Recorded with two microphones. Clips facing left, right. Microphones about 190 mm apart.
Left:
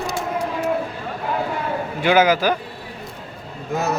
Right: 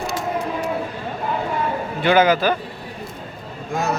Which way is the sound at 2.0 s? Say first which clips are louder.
Even; 10° left (ahead or behind).